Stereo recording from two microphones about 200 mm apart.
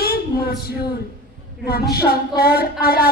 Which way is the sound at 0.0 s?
50° left (ahead or behind).